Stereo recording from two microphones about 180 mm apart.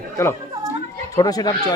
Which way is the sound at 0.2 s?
15° left (ahead or behind).